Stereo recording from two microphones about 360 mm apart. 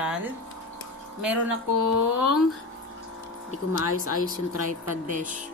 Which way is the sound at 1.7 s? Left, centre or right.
Left.